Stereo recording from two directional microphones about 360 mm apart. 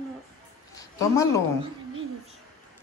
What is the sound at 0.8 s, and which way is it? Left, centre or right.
Speech, centre.